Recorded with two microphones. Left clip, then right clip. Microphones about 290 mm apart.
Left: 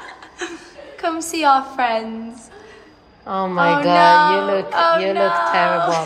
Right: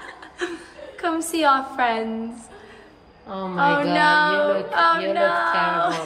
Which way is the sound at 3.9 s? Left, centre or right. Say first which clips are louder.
Left 6 dB; centre.